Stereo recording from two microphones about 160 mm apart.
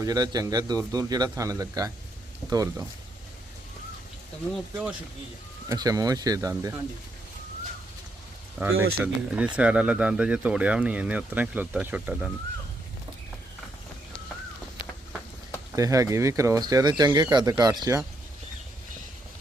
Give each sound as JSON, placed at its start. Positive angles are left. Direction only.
{"t": 0.0, "sound": "a man's voice", "side_deg": -25}
{"t": 5.6, "sound": "a man's voice", "side_deg": -20}
{"t": 8.6, "sound": "speech", "side_deg": -15}
{"t": 15.7, "sound": "a man's voice", "side_deg": -20}